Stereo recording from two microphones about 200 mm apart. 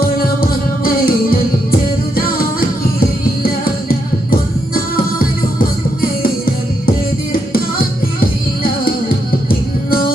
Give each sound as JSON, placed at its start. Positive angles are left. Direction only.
{"t": 0.9, "sound": "music", "side_deg": 45}
{"t": 7.5, "sound": "music", "side_deg": 45}